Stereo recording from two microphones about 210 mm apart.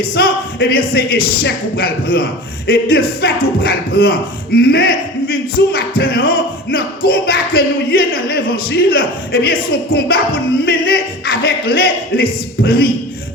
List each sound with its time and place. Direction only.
0.0 s music: 45° left (ahead or behind)